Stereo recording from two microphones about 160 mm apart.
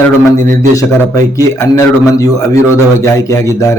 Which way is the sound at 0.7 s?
20° left (ahead or behind).